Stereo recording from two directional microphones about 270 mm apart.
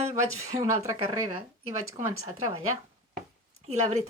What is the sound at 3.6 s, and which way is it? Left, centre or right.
Speech, right.